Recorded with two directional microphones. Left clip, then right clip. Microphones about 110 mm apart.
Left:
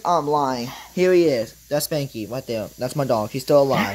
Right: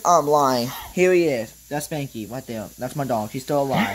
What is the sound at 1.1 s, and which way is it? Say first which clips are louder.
Speech: left 3 dB; 60° left (ahead or behind).